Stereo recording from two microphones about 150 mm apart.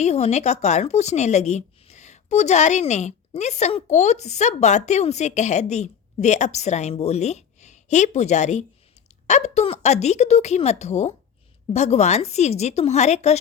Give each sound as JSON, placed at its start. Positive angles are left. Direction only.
{"t": 0.0, "sound": "a woman's voice", "side_deg": 45}